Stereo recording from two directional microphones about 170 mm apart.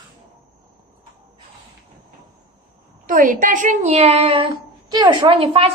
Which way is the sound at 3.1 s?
50° right (ahead or behind).